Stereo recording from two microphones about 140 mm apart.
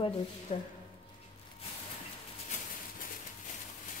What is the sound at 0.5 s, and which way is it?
Speech, 60° left (ahead or behind).